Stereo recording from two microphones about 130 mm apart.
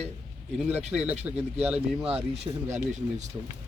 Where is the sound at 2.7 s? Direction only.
65° right (ahead or behind).